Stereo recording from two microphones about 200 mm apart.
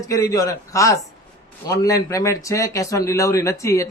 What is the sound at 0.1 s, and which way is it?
Speech, 15° left (ahead or behind).